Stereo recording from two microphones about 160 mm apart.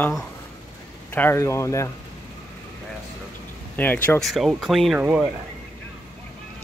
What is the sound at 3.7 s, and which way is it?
Speech, 10° left (ahead or behind).